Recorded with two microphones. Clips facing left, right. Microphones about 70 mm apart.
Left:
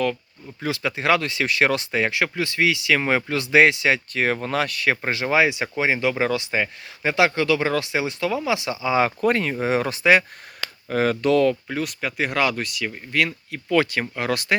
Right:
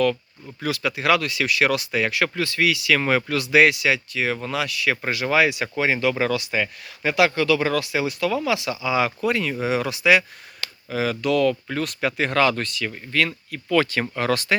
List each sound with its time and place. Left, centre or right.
0.6 s speech: left
11.7 s speech: centre